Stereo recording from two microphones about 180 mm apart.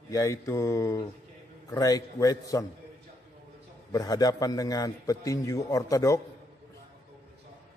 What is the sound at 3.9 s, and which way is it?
A man's voice, 20° left (ahead or behind).